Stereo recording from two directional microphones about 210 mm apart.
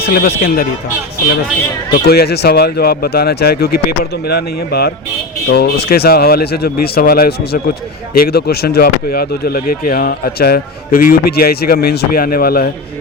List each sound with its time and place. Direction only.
0.0 s speech: 50° left (ahead or behind)
2.0 s speech: 50° left (ahead or behind)